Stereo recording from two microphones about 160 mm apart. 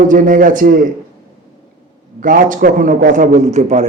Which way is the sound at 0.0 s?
55° right (ahead or behind).